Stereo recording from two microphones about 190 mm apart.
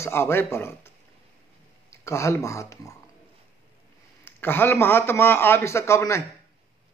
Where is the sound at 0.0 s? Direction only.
15° left (ahead or behind).